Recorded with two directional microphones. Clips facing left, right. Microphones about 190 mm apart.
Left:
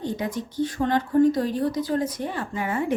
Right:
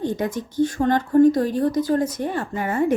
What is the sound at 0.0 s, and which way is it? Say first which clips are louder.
Speech: right 4 dB; 50° right (ahead or behind).